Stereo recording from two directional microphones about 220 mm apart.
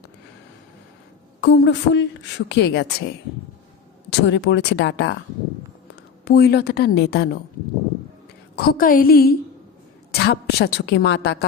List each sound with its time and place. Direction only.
1.4 s a woman's voice: 50° left (ahead or behind)
4.1 s speech: 55° left (ahead or behind)
6.2 s a woman's voice: 45° left (ahead or behind)
8.5 s a woman's voice: 40° left (ahead or behind)